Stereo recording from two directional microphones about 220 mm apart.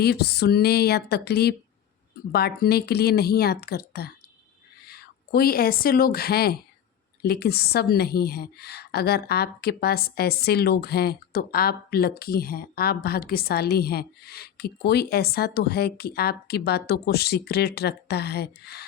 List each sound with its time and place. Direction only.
0.0 s a woman's voice: 45° left (ahead or behind)